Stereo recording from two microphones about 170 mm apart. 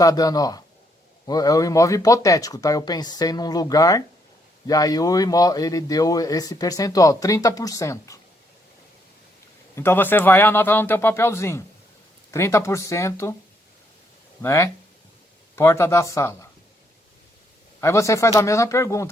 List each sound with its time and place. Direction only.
0.0 s speech: 20° left (ahead or behind)
9.7 s speech: 15° left (ahead or behind)
14.4 s speech: 15° left (ahead or behind)
17.7 s speech: 15° left (ahead or behind)